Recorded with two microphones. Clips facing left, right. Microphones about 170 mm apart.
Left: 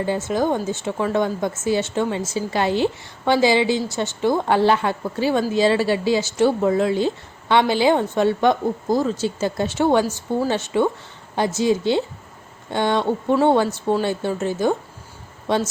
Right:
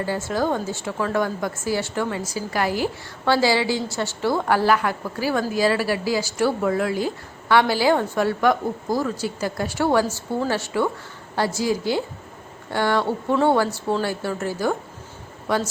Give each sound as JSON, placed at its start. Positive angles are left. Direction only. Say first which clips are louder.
{"t": 0.0, "sound": "a woman's voice", "louder": "left 3 dB", "side_deg": 20}